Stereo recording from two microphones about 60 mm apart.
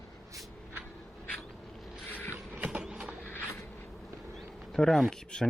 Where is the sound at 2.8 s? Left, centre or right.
Centre.